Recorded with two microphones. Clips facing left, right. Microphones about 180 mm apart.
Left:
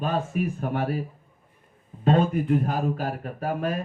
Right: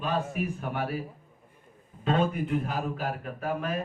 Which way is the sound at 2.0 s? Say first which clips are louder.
Left 5 dB; 45° left (ahead or behind).